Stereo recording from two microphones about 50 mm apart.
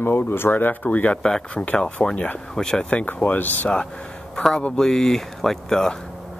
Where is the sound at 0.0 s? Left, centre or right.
Left.